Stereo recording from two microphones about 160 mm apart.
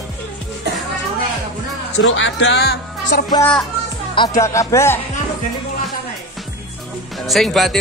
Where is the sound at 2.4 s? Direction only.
90° left.